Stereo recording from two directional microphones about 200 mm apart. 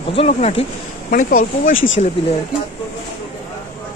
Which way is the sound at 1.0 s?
45° left (ahead or behind).